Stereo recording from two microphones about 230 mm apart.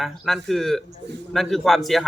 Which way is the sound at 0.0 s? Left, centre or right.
Centre.